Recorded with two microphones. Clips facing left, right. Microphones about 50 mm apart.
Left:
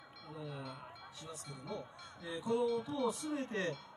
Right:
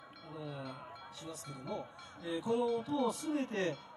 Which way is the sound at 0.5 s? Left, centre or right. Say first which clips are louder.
Right 2 dB; right.